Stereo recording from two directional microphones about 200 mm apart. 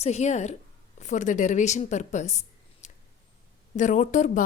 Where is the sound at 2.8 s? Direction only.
35° left (ahead or behind).